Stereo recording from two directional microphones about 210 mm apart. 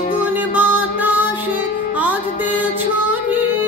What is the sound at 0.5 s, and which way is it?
Music, 10° right (ahead or behind).